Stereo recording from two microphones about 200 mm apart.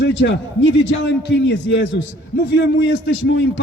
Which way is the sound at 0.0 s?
65° left (ahead or behind).